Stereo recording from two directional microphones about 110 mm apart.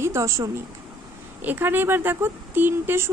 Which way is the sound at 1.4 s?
15° right (ahead or behind).